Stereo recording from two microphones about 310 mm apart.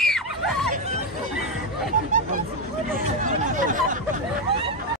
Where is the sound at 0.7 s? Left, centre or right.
Right.